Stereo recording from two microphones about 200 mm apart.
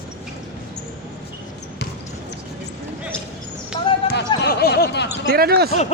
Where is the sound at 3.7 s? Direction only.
25° left (ahead or behind).